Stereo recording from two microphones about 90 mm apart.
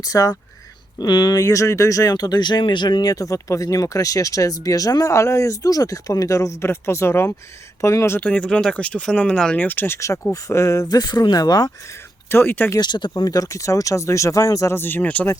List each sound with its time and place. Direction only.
0.0 s speech: 40° left (ahead or behind)
0.9 s speech: 55° left (ahead or behind)
1.4 s speech: 35° left (ahead or behind)
8.2 s speech: 15° left (ahead or behind); by 10.8 s 30° left (ahead or behind)
10.8 s speech: 50° left (ahead or behind)
12.3 s speech: 25° left (ahead or behind)
12.8 s speech: 55° left (ahead or behind); by 14.8 s 35° left (ahead or behind)
14.8 s speech: 20° left (ahead or behind)